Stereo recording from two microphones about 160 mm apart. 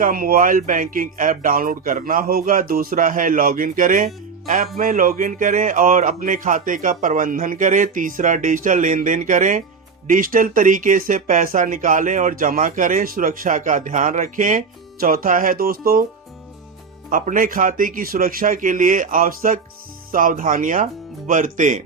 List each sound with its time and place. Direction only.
0.0 s speech: 65° right (ahead or behind)
4.4 s music: 60° right (ahead or behind)
4.8 s speech: 60° right (ahead or behind)
17.1 s speech: 55° right (ahead or behind)